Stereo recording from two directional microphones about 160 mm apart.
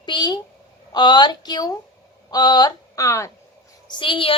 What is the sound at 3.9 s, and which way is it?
Speech, 30° left (ahead or behind).